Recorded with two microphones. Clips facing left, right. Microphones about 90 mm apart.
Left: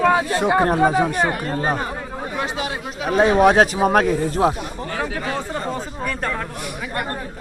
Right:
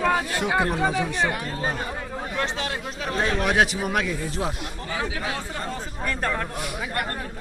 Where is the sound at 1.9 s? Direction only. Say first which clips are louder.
Left 3 dB; 10° left (ahead or behind).